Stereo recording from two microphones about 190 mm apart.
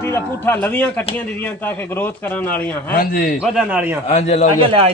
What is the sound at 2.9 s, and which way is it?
Speech, 50° left (ahead or behind).